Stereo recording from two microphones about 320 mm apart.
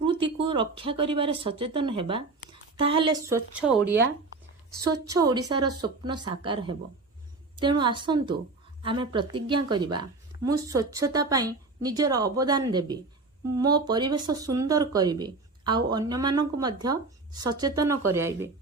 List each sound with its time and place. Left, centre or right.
0.0 s a woman's voice: centre